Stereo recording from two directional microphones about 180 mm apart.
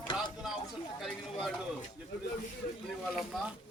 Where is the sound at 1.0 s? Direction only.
Centre (ahead or behind).